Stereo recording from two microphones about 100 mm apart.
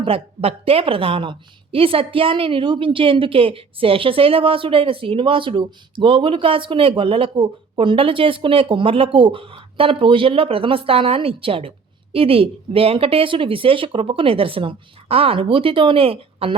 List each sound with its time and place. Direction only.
0.0 s a woman's voice: 70° right (ahead or behind)